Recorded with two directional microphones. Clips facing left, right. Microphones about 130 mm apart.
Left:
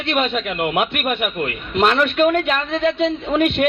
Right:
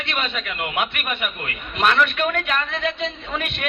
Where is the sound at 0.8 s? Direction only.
45° left (ahead or behind).